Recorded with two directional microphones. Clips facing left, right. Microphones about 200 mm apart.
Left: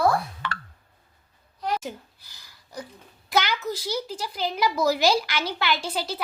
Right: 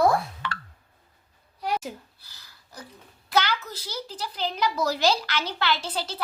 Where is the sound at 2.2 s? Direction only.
15° left (ahead or behind).